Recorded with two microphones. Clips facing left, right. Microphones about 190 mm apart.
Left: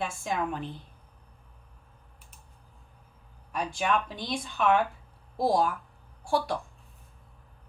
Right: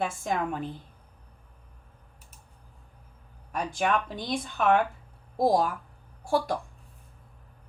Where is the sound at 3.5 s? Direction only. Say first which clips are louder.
Right 1 dB; 50° right (ahead or behind).